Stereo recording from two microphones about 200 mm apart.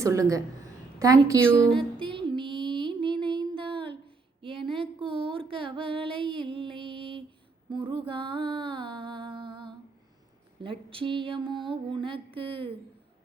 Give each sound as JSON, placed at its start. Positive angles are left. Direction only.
{"t": 0.0, "sound": "a woman's voice", "side_deg": -15}
{"t": 2.0, "sound": "a sound", "side_deg": -25}
{"t": 7.7, "sound": "music", "side_deg": -25}
{"t": 10.6, "sound": "mantra", "side_deg": -25}